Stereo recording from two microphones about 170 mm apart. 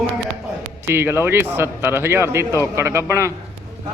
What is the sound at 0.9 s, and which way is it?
Speech, 15° right (ahead or behind).